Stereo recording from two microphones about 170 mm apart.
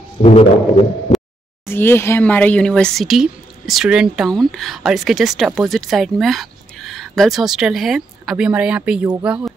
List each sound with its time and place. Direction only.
0.2 s a man's voice: 35° left (ahead or behind)
1.7 s speech: 15° left (ahead or behind); by 9.1 s 5° right (ahead or behind)